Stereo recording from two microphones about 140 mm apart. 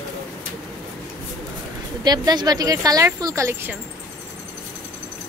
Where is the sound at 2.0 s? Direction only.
30° right (ahead or behind).